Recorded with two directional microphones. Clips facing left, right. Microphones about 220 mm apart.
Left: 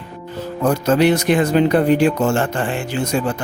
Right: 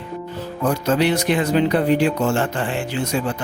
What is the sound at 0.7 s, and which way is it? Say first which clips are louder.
Speech: left 4 dB; 45° left (ahead or behind).